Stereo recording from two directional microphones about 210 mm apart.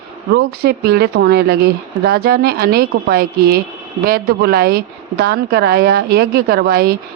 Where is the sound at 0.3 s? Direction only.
50° right (ahead or behind).